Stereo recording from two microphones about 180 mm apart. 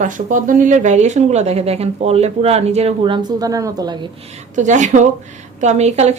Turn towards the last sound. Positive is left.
turn(degrees=-40)  # may be behind; listen again after turning